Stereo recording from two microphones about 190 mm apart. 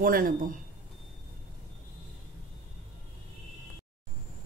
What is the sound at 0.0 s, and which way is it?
Speech, 45° right (ahead or behind).